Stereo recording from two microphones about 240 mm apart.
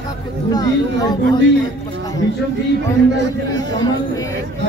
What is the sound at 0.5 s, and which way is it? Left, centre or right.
Speech, centre.